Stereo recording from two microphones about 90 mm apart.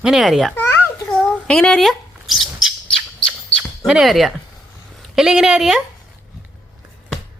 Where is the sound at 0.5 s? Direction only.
25° left (ahead or behind).